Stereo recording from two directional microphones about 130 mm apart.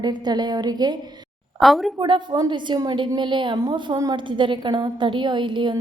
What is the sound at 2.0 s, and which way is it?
A woman's voice, 35° right (ahead or behind).